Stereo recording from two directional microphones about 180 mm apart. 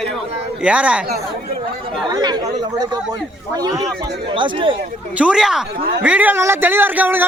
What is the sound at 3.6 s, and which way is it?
A man's voice, 20° right (ahead or behind).